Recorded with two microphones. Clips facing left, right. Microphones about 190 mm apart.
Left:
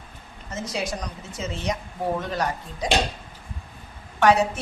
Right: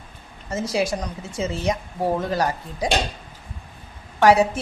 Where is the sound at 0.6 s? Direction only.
30° right (ahead or behind).